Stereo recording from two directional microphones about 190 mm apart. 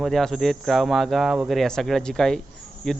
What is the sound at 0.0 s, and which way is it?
A man's voice, centre (ahead or behind).